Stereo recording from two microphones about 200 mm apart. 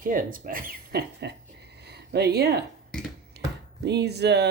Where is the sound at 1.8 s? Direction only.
55° right (ahead or behind).